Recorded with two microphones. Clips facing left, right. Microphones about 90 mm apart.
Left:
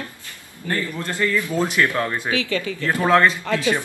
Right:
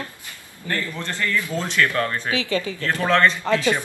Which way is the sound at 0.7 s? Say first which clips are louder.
Left 2 dB; 15° left (ahead or behind).